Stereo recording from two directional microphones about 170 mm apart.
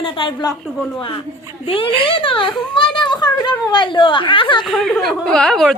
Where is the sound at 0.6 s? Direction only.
Centre (ahead or behind).